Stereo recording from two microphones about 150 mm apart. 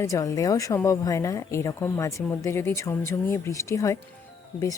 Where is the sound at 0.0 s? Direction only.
20° left (ahead or behind).